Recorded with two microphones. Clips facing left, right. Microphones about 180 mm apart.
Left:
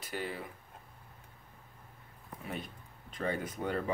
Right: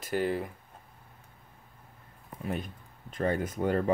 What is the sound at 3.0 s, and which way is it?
Speech, 45° right (ahead or behind).